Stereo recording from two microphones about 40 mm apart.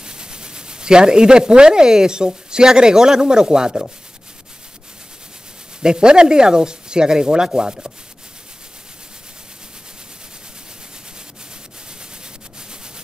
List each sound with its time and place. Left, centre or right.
0.0 s speech: right
5.8 s speech: right